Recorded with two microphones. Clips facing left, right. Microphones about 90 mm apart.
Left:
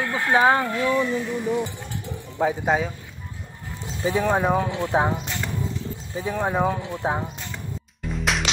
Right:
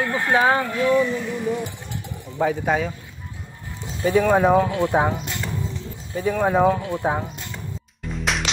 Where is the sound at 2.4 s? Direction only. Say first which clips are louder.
Right 1 dB; 15° left (ahead or behind).